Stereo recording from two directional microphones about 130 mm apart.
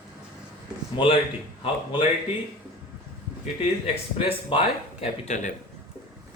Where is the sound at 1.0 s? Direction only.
35° left (ahead or behind).